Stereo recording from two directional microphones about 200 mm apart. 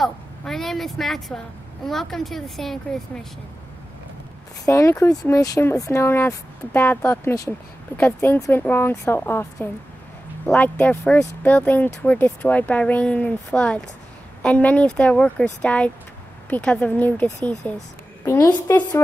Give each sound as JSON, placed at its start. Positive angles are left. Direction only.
{"t": 0.0, "sound": "speech", "side_deg": 0}
{"t": 4.6, "sound": "speech", "side_deg": 15}